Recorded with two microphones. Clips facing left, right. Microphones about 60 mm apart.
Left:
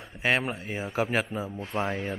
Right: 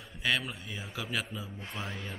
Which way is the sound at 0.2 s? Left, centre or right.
Left.